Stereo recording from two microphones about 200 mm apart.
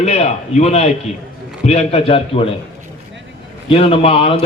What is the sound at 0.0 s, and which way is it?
A man's voice, 35° left (ahead or behind).